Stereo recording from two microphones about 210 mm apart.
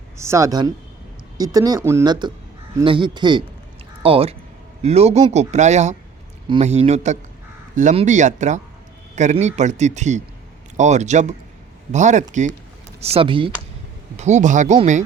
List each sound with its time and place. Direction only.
0.2 s speech: 15° right (ahead or behind); by 15.0 s 35° right (ahead or behind)